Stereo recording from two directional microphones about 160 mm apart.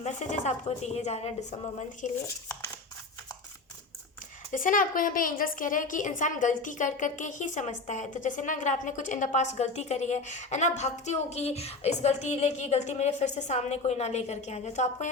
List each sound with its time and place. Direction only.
0.0 s a woman's voice: 45° left (ahead or behind)
4.5 s a woman's voice: 60° left (ahead or behind)